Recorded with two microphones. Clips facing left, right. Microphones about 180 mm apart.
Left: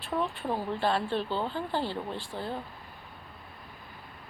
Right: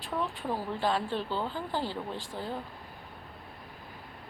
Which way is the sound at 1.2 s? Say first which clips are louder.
Left 2 dB; 15° left (ahead or behind).